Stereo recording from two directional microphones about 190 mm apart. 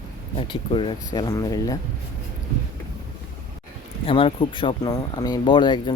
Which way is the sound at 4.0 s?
30° left (ahead or behind).